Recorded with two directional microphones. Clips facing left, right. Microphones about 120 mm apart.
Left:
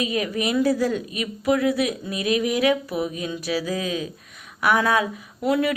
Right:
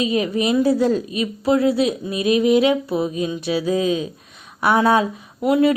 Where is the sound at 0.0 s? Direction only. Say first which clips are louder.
Right 5 dB; 25° right (ahead or behind).